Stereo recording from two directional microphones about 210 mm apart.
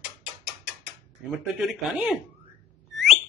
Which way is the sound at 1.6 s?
5° right (ahead or behind).